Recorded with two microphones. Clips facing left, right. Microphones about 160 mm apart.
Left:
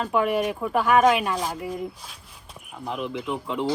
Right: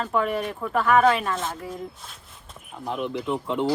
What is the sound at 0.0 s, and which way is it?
Speech, 5° left (ahead or behind).